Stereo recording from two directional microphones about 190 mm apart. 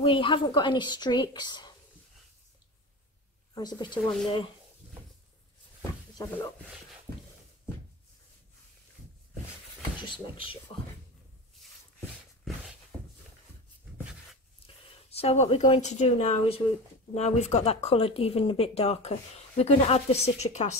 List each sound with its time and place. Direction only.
0.0 s a woman's voice: 25° left (ahead or behind)
3.5 s a woman's voice: 20° left (ahead or behind)
4.0 s speech: centre (ahead or behind)
9.8 s speech: 25° left (ahead or behind)
15.0 s speech: 30° left (ahead or behind)